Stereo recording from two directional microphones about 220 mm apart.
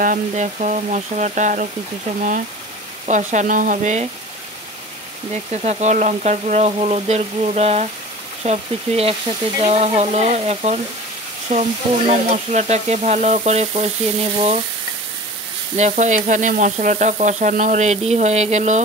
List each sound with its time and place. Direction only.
0.0 s sizzle: 35° right (ahead or behind)
3.1 s sizzle: 35° right (ahead or behind)
5.3 s sizzle: 30° right (ahead or behind)
8.5 s speech: 25° right (ahead or behind)
12.1 s sizzle: 30° right (ahead or behind)
15.7 s sizzle: 30° right (ahead or behind)